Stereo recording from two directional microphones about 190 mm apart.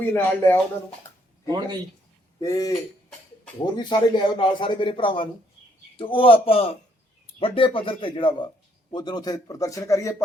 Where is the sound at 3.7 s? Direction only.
25° left (ahead or behind).